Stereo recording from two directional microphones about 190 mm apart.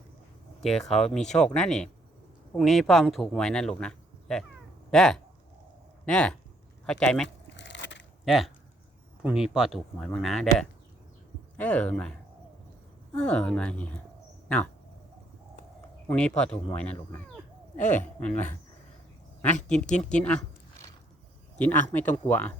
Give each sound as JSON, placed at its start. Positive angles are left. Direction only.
{"t": 0.6, "sound": "speech", "side_deg": 0}
{"t": 7.5, "sound": "a sound", "side_deg": 70}
{"t": 8.2, "sound": "speech", "side_deg": 0}
{"t": 13.1, "sound": "speech", "side_deg": 5}
{"t": 16.0, "sound": "speech", "side_deg": 5}
{"t": 17.7, "sound": "speech", "side_deg": 40}
{"t": 18.2, "sound": "speech", "side_deg": 5}
{"t": 19.6, "sound": "speech", "side_deg": 5}